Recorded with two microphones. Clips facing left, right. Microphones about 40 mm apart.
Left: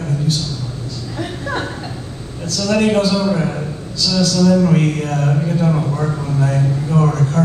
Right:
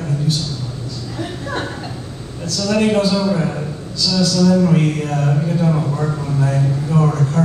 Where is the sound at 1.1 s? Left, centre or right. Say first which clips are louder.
Left 2 dB; left.